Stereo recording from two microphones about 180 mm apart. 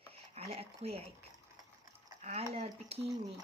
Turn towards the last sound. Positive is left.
turn(degrees=-35)  # may be behind; listen again after turning